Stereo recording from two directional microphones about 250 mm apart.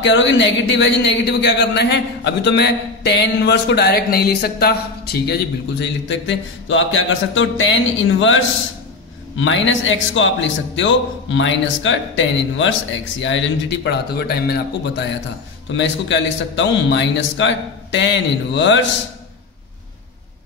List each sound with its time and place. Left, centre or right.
0.0 s speech: left